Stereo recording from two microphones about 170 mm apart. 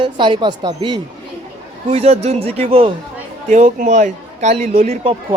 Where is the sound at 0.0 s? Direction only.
25° right (ahead or behind).